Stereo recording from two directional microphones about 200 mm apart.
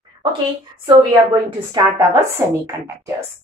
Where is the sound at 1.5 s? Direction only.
20° right (ahead or behind).